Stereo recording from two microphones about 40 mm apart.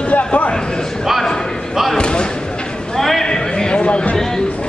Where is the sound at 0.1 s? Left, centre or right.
Left.